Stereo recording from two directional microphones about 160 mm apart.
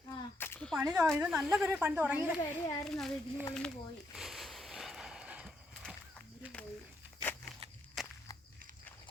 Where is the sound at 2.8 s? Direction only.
Centre (ahead or behind).